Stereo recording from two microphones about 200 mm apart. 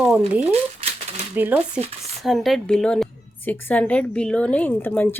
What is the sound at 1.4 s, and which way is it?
A woman's voice, 10° right (ahead or behind).